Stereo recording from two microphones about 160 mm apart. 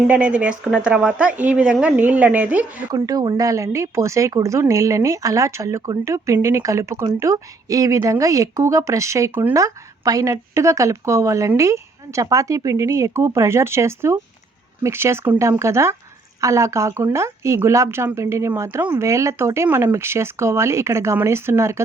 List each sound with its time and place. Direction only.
0.1 s speech: 10° right (ahead or behind)
2.9 s speech: 25° right (ahead or behind)